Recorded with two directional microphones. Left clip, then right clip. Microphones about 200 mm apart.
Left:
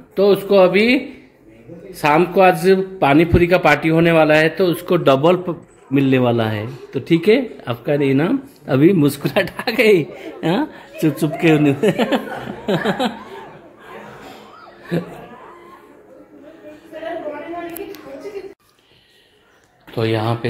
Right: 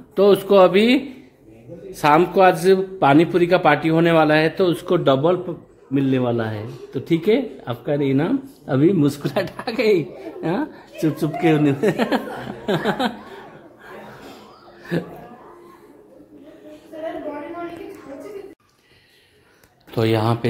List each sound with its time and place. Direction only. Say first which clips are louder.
0.1 s a man's voice: left 1 dB; 5° right (ahead or behind)
14.9 s a man's voice: left 2 dB; centre (ahead or behind)
20.0 s speech: even; 15° right (ahead or behind)